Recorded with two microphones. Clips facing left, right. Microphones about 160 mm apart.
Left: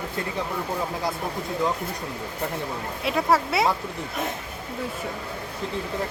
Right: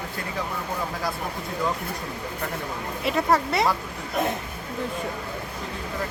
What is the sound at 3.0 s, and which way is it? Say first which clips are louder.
Speech: even; centre (ahead or behind).